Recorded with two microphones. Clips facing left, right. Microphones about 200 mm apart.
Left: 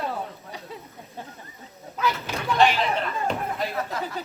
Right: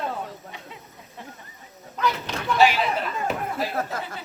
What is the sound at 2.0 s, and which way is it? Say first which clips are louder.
Speech: right 1 dB; centre (ahead or behind).